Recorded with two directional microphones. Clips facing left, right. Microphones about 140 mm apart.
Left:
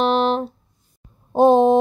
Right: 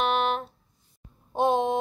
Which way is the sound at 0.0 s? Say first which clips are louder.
Left 7 dB; 35° left (ahead or behind).